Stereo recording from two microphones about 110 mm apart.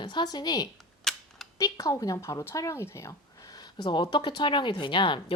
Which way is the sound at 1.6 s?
30° left (ahead or behind).